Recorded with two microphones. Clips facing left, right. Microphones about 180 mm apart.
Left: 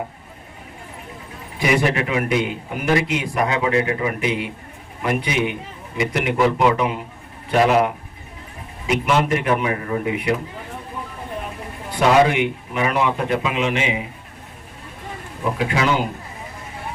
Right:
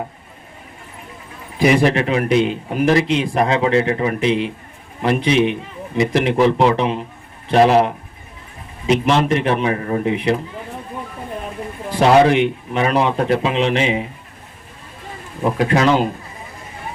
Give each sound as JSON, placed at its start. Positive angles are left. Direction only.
{"t": 1.5, "sound": "a man's voice", "side_deg": -30}
{"t": 8.9, "sound": "a man's voice", "side_deg": -30}
{"t": 11.9, "sound": "a man's voice", "side_deg": -35}
{"t": 15.5, "sound": "speech", "side_deg": -40}